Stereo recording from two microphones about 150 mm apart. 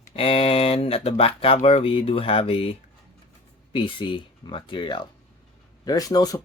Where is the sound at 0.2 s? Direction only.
40° left (ahead or behind).